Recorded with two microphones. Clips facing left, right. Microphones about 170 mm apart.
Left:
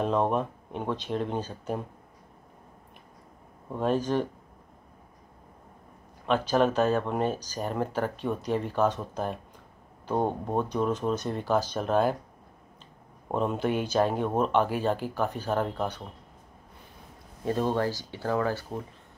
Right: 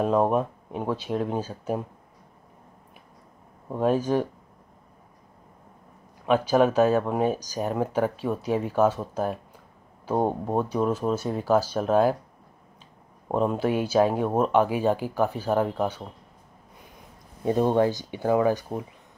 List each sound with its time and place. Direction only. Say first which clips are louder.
0.0 s speech: right 4 dB; 5° right (ahead or behind)
3.7 s speech: right 3 dB; 10° right (ahead or behind)
6.2 s speech: right 4 dB; 10° right (ahead or behind)
13.3 s speech: right 3 dB; 5° right (ahead or behind)
17.5 s speech: right 5 dB; 15° right (ahead or behind)